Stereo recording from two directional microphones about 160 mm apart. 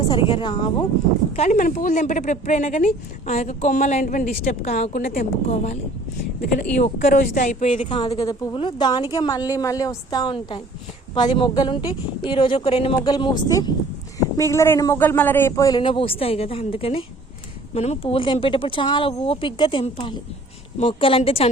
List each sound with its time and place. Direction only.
0.0 s speech: 35° left (ahead or behind)
1.4 s speech: 55° left (ahead or behind)
4.6 s speech: 40° left (ahead or behind)
4.9 s a woman's voice: 65° left (ahead or behind)
6.7 s speech: 55° left (ahead or behind)
7.9 s a woman's voice: 35° left (ahead or behind)